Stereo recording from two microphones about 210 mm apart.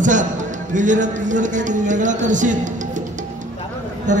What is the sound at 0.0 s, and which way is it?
Speech, 35° right (ahead or behind).